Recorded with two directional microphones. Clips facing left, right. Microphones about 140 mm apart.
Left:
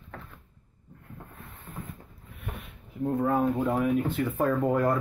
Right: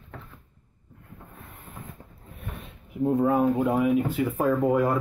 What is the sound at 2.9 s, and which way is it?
Speech, 20° right (ahead or behind).